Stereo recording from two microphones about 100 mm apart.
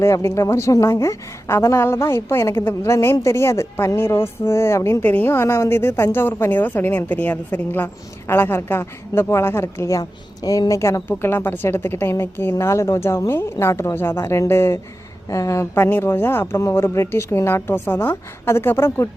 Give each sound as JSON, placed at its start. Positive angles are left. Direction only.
{"t": 0.0, "sound": "a woman's voice", "side_deg": 25}